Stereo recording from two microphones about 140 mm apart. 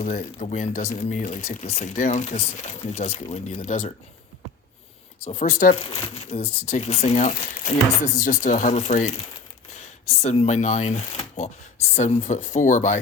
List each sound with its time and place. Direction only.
0.0 s speech: 55° left (ahead or behind)
5.2 s speech: 45° left (ahead or behind)
5.5 s speech: 70° left (ahead or behind)
6.1 s speech: 50° left (ahead or behind)